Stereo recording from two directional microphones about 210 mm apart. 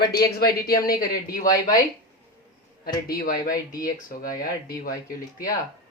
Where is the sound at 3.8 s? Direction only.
40° left (ahead or behind).